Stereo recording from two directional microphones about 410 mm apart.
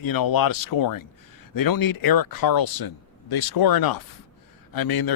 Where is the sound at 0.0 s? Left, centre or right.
Left.